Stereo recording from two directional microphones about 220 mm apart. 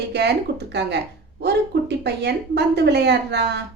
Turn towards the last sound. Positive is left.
turn(degrees=-50)  # may be behind; listen again after turning